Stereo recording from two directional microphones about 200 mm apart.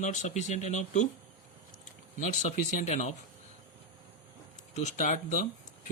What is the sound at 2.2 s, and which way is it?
Speech, 40° left (ahead or behind).